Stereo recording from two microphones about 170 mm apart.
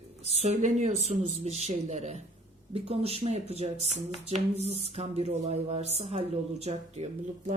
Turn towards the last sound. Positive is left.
turn(degrees=-40)  # may be behind; listen again after turning